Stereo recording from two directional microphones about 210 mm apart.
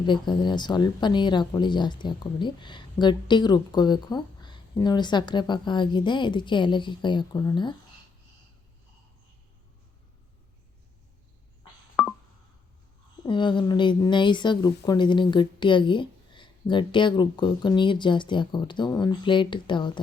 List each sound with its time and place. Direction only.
0.0 s a woman's voice: 20° left (ahead or behind)
13.2 s a woman's voice: 20° left (ahead or behind)